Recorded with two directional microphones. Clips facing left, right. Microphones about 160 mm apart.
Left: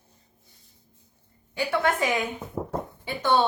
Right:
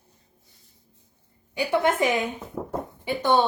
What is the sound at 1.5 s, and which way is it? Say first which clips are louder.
Speech: right 2 dB; 15° right (ahead or behind).